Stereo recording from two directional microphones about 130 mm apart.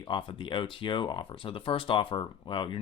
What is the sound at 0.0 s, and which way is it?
Speech, 40° left (ahead or behind).